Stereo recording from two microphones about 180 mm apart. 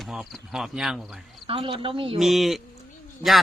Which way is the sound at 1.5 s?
30° right (ahead or behind).